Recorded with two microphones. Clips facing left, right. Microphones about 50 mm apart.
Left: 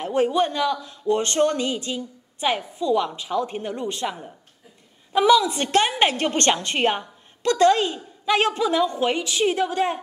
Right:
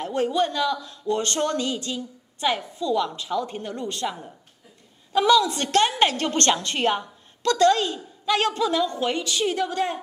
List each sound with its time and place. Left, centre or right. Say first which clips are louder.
0.0 s a woman's voice: left 2 dB; left